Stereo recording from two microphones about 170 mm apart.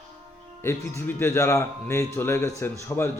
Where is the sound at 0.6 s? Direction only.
15° left (ahead or behind).